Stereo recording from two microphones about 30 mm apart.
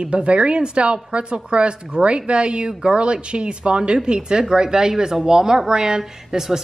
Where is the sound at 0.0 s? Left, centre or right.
Right.